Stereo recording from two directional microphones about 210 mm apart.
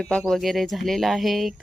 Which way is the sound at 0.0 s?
5° left (ahead or behind).